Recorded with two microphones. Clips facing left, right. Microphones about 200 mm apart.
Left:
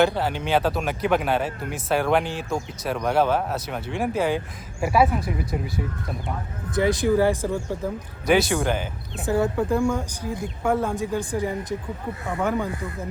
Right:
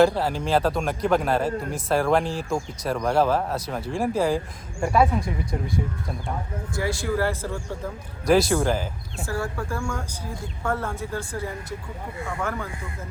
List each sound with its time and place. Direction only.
0.0 s speech: centre (ahead or behind)
6.7 s speech: 20° left (ahead or behind)
8.3 s speech: centre (ahead or behind)
9.2 s speech: 20° left (ahead or behind)